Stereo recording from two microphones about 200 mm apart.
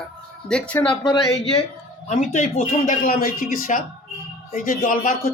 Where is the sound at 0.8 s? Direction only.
20° left (ahead or behind).